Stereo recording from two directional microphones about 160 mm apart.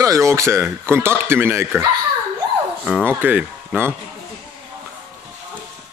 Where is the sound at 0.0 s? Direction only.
20° right (ahead or behind).